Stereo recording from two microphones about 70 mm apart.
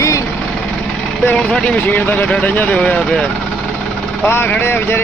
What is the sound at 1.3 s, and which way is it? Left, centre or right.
Speech, centre.